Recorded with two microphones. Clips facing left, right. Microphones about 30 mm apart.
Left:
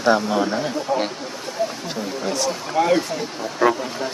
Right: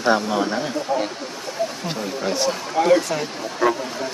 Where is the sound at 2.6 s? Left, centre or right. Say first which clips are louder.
Right 1 dB; centre.